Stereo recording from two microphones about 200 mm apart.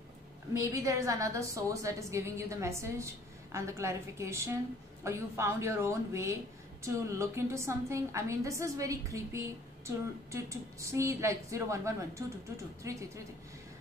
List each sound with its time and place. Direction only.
0.6 s a woman's voice: 15° right (ahead or behind)